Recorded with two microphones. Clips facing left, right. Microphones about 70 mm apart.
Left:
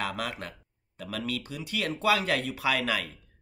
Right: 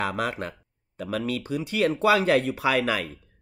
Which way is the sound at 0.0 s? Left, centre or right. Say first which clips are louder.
Right 5 dB; right.